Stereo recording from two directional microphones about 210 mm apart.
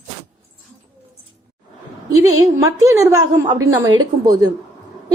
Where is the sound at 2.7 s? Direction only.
15° right (ahead or behind).